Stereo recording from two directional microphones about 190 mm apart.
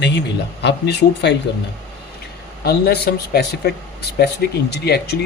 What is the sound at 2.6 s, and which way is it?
Speech, 55° left (ahead or behind).